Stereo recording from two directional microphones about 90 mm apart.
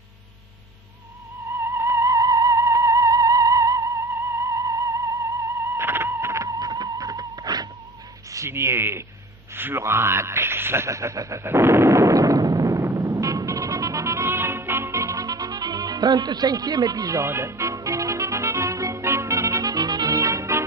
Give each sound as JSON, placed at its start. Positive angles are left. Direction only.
{"t": 1.5, "sound": "theremin", "side_deg": -30}
{"t": 8.3, "sound": "speech", "side_deg": -30}
{"t": 9.6, "sound": "a sound", "side_deg": -25}